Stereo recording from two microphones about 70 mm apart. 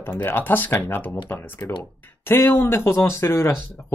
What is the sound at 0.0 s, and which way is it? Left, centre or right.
Speech, left.